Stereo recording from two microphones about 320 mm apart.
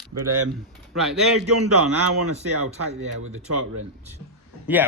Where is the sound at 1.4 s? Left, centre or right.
Right.